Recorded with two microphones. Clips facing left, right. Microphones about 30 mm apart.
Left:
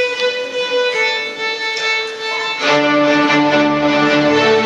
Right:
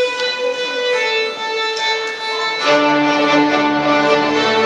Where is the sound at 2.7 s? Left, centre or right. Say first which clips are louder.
Left 1 dB; centre.